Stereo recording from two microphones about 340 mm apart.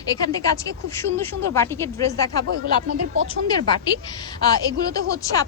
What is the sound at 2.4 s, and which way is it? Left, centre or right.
Speech, right.